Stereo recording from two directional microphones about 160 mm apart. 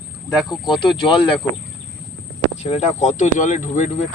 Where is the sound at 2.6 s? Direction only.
40° left (ahead or behind).